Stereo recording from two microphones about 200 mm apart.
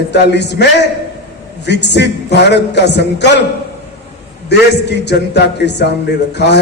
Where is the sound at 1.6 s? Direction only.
60° left (ahead or behind).